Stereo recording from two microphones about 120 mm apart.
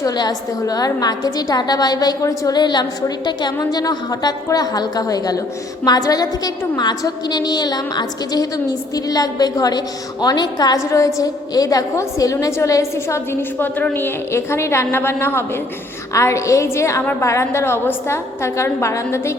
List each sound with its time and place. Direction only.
0.0 s a woman's voice: 35° left (ahead or behind)